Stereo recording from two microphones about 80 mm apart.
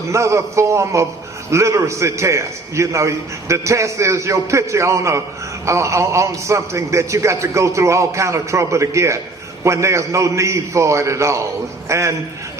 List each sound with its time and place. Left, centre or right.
0.1 s a man's voice: right